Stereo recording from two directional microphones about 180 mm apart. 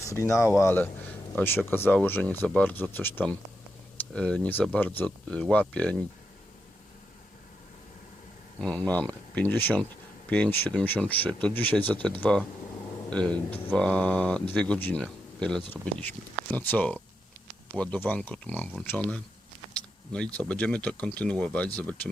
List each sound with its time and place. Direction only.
0.0 s speech: 15° left (ahead or behind)
8.6 s speech: 5° left (ahead or behind)